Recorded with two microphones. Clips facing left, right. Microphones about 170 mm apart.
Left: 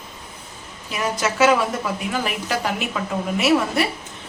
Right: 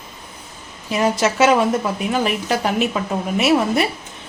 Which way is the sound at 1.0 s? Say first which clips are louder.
Right 3 dB; 30° right (ahead or behind).